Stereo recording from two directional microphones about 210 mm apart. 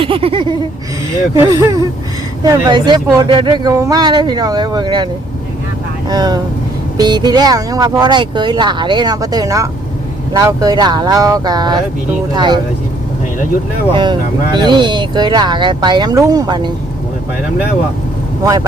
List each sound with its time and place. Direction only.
0.0 s a sound: 25° right (ahead or behind)
1.3 s speech: 15° right (ahead or behind)
6.1 s speech: 20° right (ahead or behind)
13.9 s speech: 20° right (ahead or behind)